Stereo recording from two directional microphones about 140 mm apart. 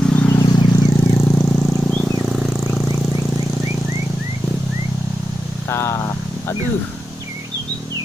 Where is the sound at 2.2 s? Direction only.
Centre (ahead or behind).